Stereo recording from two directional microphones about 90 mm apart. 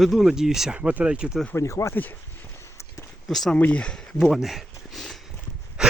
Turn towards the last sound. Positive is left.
turn(degrees=-10)  # may be behind; listen again after turning